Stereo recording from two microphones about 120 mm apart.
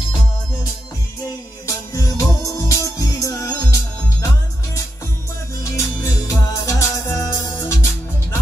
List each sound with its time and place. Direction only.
1.7 s music: 30° left (ahead or behind)
5.6 s music: 25° left (ahead or behind)